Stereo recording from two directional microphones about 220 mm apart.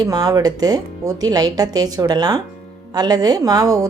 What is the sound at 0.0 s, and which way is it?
A woman's voice, 15° right (ahead or behind).